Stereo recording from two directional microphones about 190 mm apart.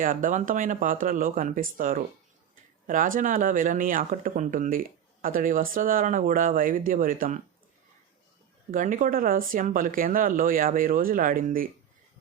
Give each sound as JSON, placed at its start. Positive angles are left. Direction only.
{"t": 0.0, "sound": "speech", "side_deg": -45}
{"t": 8.7, "sound": "speech", "side_deg": -45}